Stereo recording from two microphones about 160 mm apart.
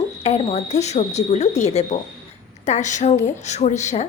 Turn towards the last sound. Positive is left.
turn(degrees=45)  # may be behind; listen again after turning